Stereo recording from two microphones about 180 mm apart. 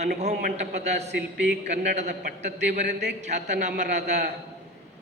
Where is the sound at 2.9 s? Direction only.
70° right (ahead or behind).